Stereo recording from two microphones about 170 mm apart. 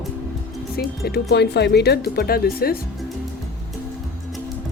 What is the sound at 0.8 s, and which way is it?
Speech, 65° left (ahead or behind).